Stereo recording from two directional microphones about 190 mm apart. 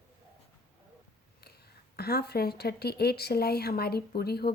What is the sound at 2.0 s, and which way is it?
A woman's voice, 55° left (ahead or behind).